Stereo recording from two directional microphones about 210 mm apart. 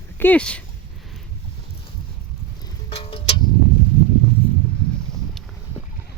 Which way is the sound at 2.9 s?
25° left (ahead or behind).